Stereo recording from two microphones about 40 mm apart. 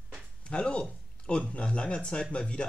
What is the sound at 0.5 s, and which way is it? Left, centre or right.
Speech, left.